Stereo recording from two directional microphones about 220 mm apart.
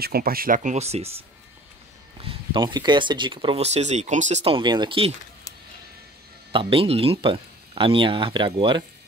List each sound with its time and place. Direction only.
0.0 s speech: 45° right (ahead or behind)
2.2 s speech: 20° right (ahead or behind)
6.5 s speech: 25° right (ahead or behind)